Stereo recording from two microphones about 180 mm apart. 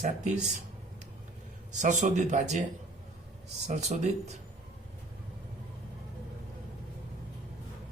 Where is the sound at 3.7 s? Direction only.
40° right (ahead or behind).